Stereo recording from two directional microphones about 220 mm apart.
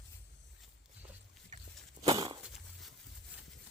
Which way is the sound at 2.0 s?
25° right (ahead or behind).